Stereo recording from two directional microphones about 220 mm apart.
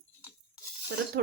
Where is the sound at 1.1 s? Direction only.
45° right (ahead or behind).